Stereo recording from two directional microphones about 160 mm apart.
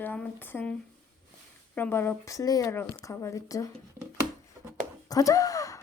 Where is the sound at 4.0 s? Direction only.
15° right (ahead or behind).